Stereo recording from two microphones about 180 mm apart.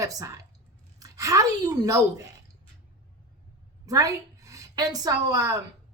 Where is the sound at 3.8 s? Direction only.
20° right (ahead or behind).